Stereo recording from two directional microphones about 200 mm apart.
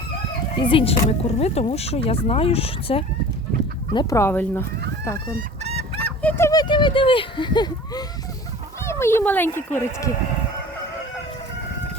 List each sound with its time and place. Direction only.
0.5 s speech: 25° left (ahead or behind)
3.9 s speech: 15° left (ahead or behind)
6.2 s speech: 10° left (ahead or behind)